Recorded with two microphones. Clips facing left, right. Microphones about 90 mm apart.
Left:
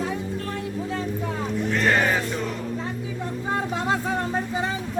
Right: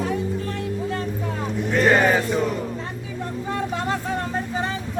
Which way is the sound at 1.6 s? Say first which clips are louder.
Right 5 dB; 10° right (ahead or behind).